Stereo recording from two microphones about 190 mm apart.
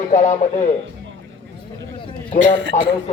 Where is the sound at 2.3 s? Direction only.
80° right.